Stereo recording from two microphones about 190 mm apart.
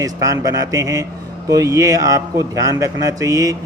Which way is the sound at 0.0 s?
15° right (ahead or behind).